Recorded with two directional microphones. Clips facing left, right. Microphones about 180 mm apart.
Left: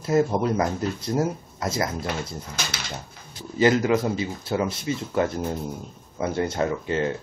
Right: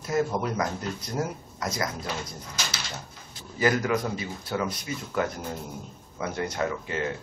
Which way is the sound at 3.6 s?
25° left (ahead or behind).